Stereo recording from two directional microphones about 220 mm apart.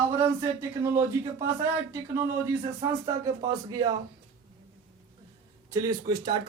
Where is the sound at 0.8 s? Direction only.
10° right (ahead or behind).